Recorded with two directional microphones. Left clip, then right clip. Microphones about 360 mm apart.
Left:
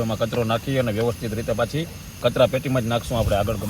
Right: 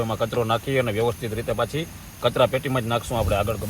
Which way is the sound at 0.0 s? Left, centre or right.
Centre.